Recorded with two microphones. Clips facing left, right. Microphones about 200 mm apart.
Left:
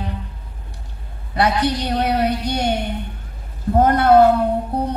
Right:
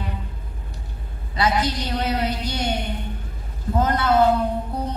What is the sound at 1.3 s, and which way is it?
A man's voice, 65° left (ahead or behind).